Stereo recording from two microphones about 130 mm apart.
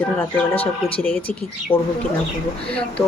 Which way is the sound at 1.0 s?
10° left (ahead or behind).